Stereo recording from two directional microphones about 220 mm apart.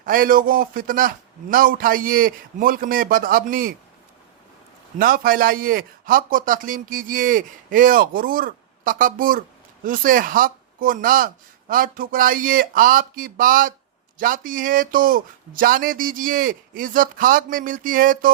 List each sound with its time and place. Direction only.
0.0 s a man's voice: 40° right (ahead or behind)
4.9 s a man's voice: 40° right (ahead or behind)